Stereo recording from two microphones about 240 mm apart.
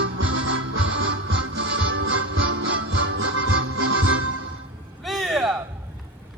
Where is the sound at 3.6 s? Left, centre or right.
Right.